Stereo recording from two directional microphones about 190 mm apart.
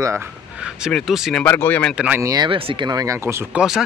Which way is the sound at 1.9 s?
10° right (ahead or behind).